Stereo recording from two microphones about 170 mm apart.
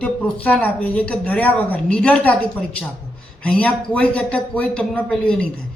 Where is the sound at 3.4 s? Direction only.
10° left (ahead or behind).